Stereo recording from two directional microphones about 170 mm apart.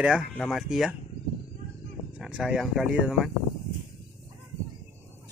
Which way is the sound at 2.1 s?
5° right (ahead or behind).